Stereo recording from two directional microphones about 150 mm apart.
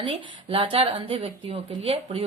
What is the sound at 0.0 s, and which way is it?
Speech, 40° right (ahead or behind).